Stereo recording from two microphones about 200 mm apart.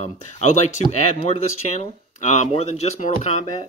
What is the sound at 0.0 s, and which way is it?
Speech, 35° left (ahead or behind).